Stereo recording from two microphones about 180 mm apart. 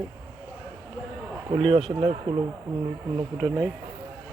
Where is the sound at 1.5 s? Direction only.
35° right (ahead or behind).